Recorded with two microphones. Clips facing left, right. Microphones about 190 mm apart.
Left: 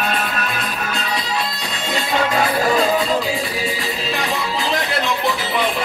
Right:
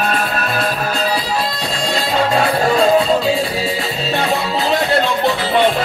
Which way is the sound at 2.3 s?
30° right (ahead or behind).